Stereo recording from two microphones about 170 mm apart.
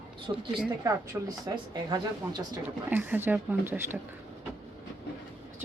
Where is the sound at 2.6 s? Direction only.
10° right (ahead or behind).